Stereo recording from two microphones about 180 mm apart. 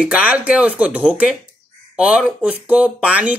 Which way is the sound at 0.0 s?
5° right (ahead or behind).